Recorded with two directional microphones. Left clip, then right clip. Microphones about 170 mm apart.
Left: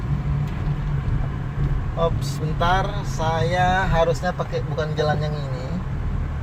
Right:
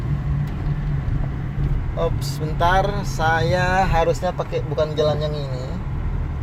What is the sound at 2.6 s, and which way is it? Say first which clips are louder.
Speech: right 3 dB; 50° right (ahead or behind).